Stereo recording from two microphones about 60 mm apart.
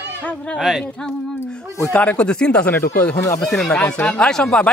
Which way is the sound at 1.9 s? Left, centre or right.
Left.